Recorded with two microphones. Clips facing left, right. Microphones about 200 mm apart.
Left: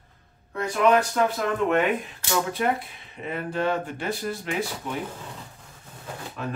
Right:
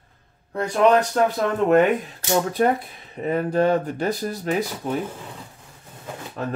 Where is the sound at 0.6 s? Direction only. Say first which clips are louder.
Right 3 dB; 35° right (ahead or behind).